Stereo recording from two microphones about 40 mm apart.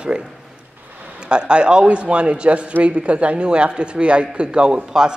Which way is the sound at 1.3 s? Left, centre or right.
Right.